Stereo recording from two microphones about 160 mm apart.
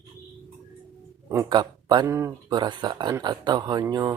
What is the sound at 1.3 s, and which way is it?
Speech, 20° right (ahead or behind).